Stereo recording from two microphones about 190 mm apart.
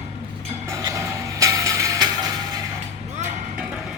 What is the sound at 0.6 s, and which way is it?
Music, 15° right (ahead or behind).